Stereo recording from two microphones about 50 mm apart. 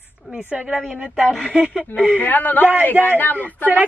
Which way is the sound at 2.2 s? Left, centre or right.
Left.